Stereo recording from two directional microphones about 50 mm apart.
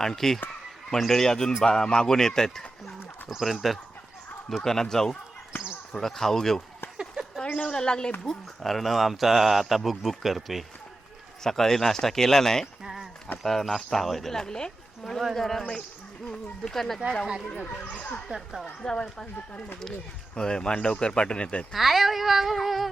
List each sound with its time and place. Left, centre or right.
0.0 s speech: centre
3.2 s speech: centre
6.9 s a sound: centre
7.4 s a woman's voice: centre
8.3 s speech: centre
12.8 s a sound: centre
13.4 s speech: centre
16.6 s speech: centre
17.6 s speech: left
18.3 s speech: centre
18.8 s speech: centre
21.7 s speech: centre